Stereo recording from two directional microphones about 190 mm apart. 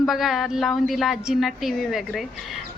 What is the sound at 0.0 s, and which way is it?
Speech, centre (ahead or behind).